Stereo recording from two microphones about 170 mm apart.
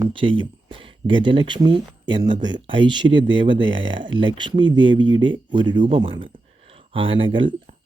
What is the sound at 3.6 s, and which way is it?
Speech, 90° right.